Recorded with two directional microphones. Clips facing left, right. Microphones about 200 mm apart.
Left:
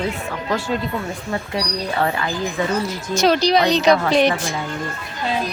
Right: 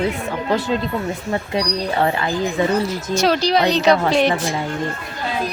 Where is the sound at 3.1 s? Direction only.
5° right (ahead or behind).